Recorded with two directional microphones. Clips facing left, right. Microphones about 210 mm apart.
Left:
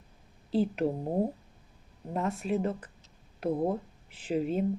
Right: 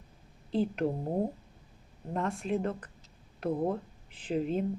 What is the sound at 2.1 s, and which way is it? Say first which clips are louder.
Speech: left 1 dB; 5° left (ahead or behind).